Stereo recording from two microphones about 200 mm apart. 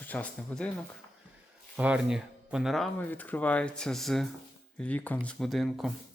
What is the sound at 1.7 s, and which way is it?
Speech, 5° right (ahead or behind).